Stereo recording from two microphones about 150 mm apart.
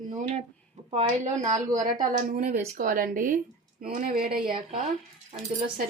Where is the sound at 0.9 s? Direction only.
50° right (ahead or behind).